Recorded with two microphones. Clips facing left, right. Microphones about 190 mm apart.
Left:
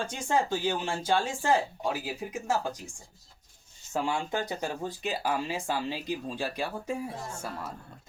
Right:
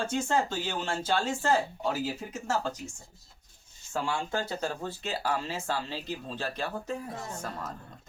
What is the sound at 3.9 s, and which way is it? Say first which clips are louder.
Speech: left 1 dB; 15° left (ahead or behind).